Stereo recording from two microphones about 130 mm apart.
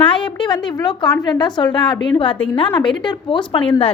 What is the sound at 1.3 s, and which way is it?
A woman's voice, 35° left (ahead or behind).